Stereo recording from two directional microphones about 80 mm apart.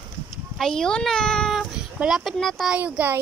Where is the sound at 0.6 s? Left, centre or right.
Centre.